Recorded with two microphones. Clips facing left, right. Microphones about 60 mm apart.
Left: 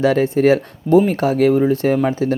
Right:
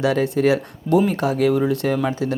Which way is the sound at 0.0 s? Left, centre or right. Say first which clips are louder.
Left 4 dB; left.